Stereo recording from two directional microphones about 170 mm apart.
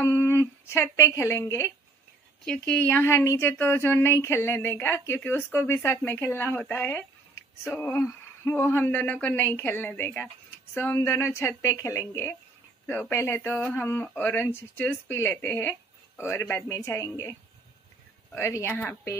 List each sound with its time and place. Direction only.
0.0 s a sound: 15° left (ahead or behind)
0.9 s speech: 15° left (ahead or behind)
2.4 s speech: 5° left (ahead or behind)